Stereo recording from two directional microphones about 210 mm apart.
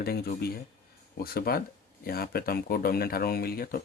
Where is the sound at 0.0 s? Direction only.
45° left (ahead or behind).